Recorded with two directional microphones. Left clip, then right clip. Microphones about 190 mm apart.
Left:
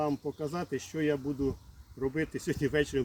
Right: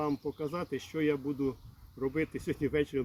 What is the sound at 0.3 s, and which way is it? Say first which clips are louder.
Speech: left 1 dB; 30° left (ahead or behind).